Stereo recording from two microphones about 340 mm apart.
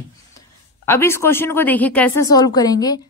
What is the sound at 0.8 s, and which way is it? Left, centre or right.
Speech, centre.